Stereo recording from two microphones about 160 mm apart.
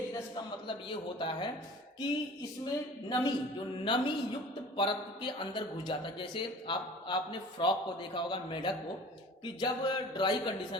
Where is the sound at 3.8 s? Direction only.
30° left (ahead or behind).